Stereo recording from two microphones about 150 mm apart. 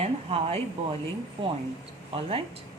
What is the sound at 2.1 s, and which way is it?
Speech, 40° right (ahead or behind).